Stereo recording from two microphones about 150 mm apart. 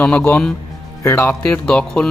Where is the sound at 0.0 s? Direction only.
10° left (ahead or behind).